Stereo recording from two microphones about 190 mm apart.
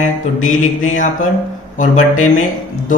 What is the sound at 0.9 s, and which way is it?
Mantra, 40° left (ahead or behind).